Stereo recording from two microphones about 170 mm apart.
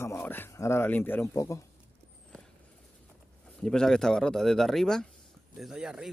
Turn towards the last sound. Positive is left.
turn(degrees=-5)  # may be behind; listen again after turning